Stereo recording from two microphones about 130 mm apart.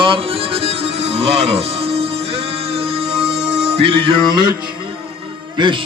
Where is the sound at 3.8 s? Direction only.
45° right (ahead or behind).